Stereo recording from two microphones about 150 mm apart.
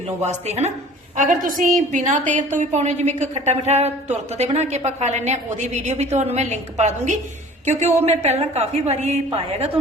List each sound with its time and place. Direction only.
0.2 s a woman's voice: 45° right (ahead or behind)
1.1 s a woman's voice: 60° right (ahead or behind)